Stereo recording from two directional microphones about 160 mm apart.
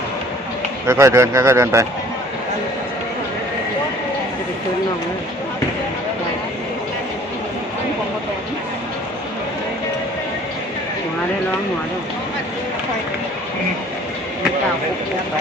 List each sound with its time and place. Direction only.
0.9 s a man's voice: 20° right (ahead or behind)